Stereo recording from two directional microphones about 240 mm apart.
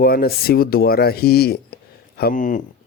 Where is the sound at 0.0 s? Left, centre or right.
Left.